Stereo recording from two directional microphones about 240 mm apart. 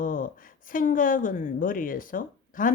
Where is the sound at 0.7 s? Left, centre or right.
Left.